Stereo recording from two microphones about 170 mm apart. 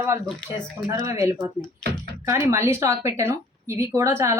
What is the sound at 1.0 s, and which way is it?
Speech, 15° right (ahead or behind).